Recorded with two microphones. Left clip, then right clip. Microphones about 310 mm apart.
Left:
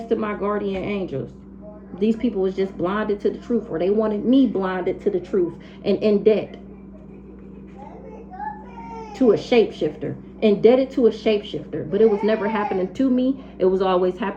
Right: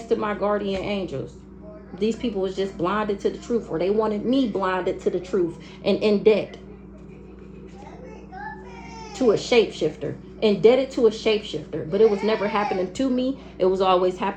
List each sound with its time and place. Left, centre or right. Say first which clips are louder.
0.1 s speech: right 1 dB; centre
9.1 s speech: left 2 dB; centre